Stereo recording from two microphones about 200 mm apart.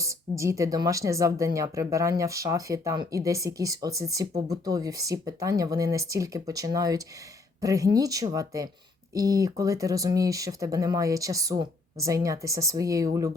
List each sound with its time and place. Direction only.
0.0 s speech: 15° right (ahead or behind)